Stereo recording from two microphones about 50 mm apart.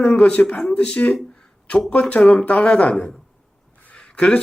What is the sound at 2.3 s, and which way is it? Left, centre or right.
Speech, left.